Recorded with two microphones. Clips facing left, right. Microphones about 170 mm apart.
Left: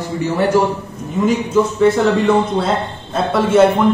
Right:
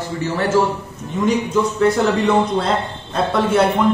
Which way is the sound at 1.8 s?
Centre (ahead or behind).